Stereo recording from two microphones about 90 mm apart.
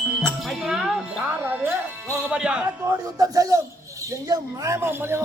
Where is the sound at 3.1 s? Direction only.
40° right (ahead or behind).